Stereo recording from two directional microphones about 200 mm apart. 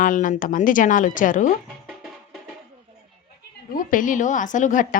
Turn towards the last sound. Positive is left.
turn(degrees=40)  # may be behind; listen again after turning